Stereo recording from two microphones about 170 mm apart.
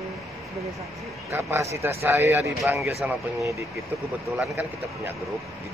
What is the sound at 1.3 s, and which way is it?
Speech, 15° right (ahead or behind).